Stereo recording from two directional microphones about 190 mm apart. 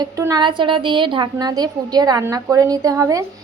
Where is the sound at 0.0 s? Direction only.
20° right (ahead or behind).